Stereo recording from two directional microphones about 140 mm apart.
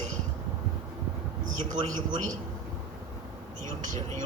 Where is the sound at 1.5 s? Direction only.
65° right (ahead or behind).